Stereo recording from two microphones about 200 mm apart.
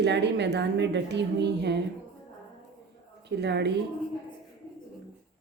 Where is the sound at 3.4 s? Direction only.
55° right (ahead or behind).